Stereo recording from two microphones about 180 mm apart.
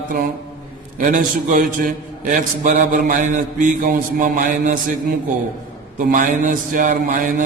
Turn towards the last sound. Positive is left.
turn(degrees=-50)  # may be behind; listen again after turning